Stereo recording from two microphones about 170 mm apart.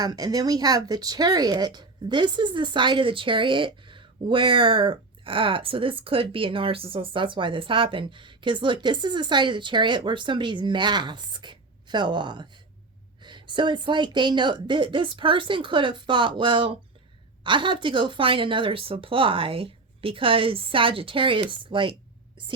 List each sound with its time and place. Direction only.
0.0 s a woman's voice: 25° right (ahead or behind)